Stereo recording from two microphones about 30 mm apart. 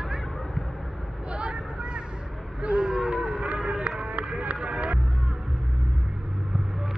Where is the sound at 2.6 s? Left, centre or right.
Right.